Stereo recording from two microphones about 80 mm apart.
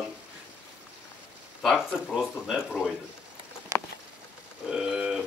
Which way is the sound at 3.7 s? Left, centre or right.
Right.